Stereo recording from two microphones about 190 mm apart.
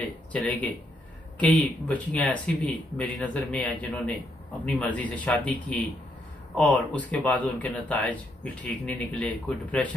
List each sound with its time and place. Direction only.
0.3 s speech: 5° left (ahead or behind)